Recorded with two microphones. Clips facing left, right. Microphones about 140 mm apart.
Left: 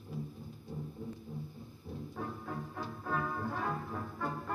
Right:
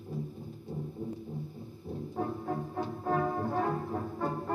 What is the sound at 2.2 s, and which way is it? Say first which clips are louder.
Music: right 8 dB; 35° right (ahead or behind).